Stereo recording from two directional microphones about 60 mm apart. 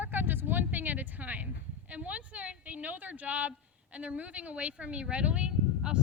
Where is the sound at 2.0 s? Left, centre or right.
Right.